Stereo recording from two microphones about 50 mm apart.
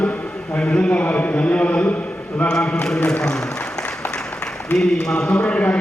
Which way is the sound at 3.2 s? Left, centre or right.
Centre.